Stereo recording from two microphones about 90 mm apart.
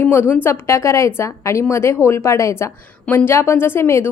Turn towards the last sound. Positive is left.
turn(degrees=25)  # may be behind; listen again after turning